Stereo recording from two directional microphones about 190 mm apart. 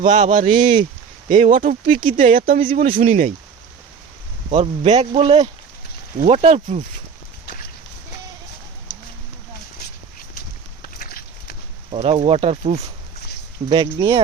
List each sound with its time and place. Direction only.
0.0 s speech: 40° right (ahead or behind)
4.5 s speech: 35° right (ahead or behind)
10.8 s a sound: 50° left (ahead or behind)
11.9 s speech: 30° right (ahead or behind)